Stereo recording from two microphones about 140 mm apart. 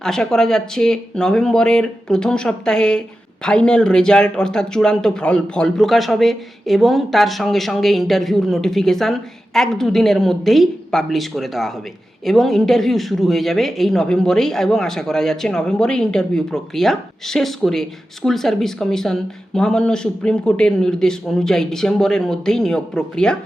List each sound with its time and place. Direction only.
0.0 s speech: 5° left (ahead or behind)